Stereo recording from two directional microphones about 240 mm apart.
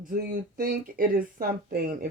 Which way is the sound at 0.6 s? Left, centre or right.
Right.